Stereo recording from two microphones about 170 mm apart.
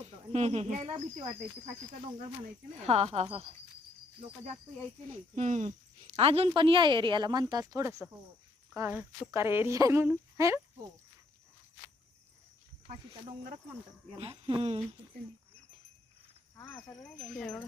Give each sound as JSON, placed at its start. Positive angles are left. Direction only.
{"t": 0.3, "sound": "speech", "side_deg": -40}
{"t": 2.7, "sound": "speech", "side_deg": -40}
{"t": 5.3, "sound": "speech", "side_deg": -45}
{"t": 14.2, "sound": "speech", "side_deg": -35}
{"t": 17.0, "sound": "wind chime", "side_deg": 5}